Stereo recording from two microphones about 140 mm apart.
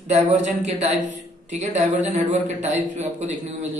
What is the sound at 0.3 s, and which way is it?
Mantra, 55° right (ahead or behind).